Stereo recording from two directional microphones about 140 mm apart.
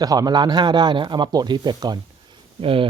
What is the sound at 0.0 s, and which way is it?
Speech, 25° right (ahead or behind).